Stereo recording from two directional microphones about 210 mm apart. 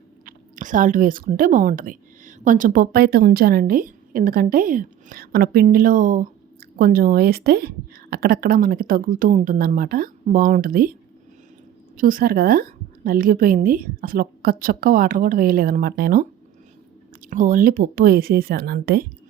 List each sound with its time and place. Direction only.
0.3 s a woman's voice: 40° right (ahead or behind)
11.9 s a woman's voice: 40° right (ahead or behind)
17.2 s a woman's voice: 40° right (ahead or behind)